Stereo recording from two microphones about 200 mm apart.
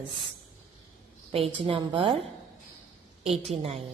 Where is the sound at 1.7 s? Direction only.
25° right (ahead or behind).